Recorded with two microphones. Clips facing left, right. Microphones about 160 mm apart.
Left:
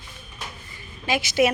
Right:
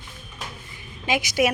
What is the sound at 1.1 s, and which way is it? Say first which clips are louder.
Speech: left 1 dB; 15° right (ahead or behind).